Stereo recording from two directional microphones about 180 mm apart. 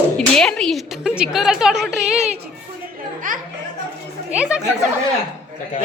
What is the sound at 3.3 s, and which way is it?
Speech, 45° right (ahead or behind).